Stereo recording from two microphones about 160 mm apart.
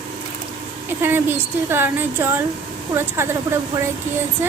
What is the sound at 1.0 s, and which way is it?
A woman's voice, 15° right (ahead or behind).